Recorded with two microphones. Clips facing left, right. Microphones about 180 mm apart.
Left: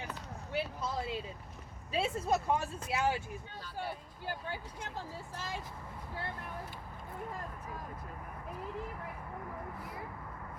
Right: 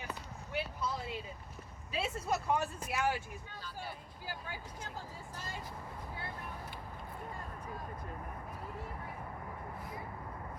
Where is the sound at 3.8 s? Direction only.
55° left (ahead or behind).